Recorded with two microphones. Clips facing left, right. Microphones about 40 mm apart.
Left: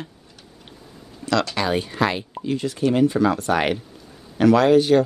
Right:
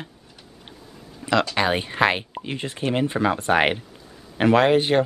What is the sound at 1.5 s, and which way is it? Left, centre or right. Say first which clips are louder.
Speech: right 1 dB; right.